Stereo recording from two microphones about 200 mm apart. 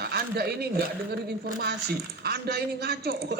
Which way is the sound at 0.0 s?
50° right (ahead or behind).